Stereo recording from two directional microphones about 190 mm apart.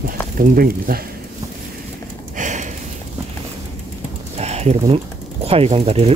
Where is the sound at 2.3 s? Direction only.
40° right (ahead or behind).